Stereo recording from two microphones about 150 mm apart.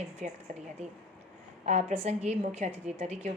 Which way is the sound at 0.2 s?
50° right (ahead or behind).